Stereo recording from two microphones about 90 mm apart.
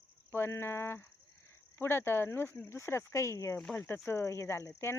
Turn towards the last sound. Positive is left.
turn(degrees=30)  # may be behind; listen again after turning